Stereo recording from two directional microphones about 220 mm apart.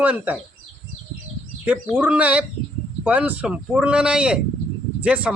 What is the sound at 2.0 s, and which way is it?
Speech, 5° right (ahead or behind).